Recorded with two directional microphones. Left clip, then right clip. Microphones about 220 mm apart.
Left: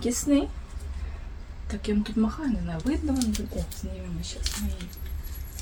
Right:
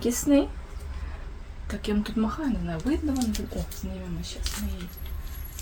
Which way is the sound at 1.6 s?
20° right (ahead or behind).